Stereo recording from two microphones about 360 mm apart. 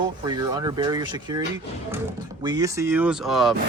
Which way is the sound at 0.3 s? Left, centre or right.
Centre.